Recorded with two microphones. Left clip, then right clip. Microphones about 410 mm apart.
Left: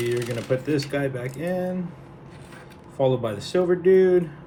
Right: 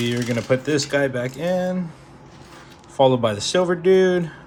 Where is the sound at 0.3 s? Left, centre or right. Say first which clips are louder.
Right 4 dB; right.